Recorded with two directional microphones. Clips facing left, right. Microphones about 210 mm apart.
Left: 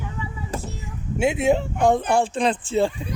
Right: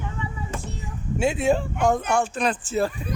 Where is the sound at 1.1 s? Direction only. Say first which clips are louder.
Left 2 dB; 20° left (ahead or behind).